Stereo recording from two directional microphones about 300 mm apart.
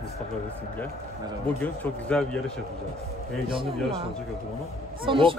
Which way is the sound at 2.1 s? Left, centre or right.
Centre.